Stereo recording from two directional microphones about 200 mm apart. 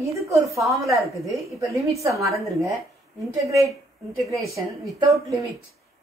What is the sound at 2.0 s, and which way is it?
Speech, 15° right (ahead or behind).